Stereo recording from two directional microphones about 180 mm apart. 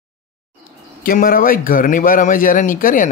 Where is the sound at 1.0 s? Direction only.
50° left (ahead or behind).